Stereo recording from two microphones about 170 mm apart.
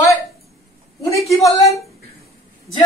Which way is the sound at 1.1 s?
Centre (ahead or behind).